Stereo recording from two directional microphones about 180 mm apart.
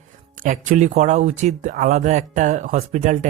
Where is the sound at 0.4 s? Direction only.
45° right (ahead or behind).